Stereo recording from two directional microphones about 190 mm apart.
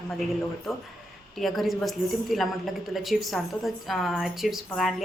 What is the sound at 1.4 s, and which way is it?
A woman's voice, centre (ahead or behind).